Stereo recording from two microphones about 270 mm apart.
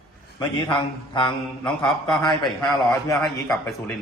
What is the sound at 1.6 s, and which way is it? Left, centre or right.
Speech, centre.